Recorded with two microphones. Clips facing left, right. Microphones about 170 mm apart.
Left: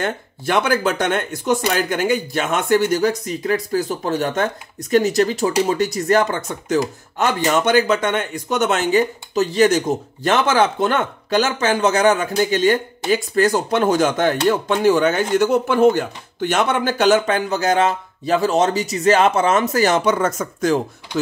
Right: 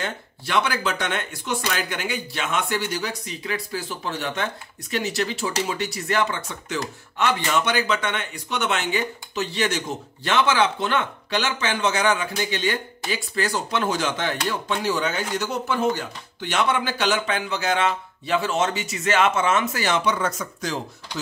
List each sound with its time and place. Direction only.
0.0 s speech: 50° left (ahead or behind)